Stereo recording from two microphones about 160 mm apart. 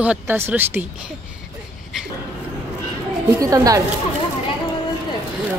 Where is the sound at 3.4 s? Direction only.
20° right (ahead or behind).